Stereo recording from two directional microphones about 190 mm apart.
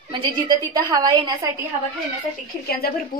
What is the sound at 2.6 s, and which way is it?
Speech, 55° left (ahead or behind).